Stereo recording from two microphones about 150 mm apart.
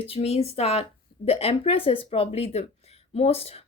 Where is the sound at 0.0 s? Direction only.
40° left (ahead or behind).